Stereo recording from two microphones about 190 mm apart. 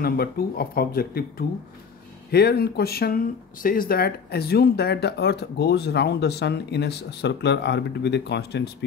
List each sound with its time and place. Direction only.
0.0 s speech: 55° left (ahead or behind)
2.3 s speech: 55° left (ahead or behind)